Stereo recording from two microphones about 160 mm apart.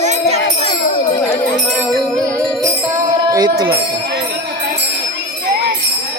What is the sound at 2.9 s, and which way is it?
Music, 20° right (ahead or behind).